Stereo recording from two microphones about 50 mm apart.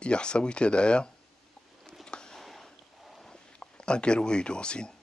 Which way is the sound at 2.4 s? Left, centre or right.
Centre.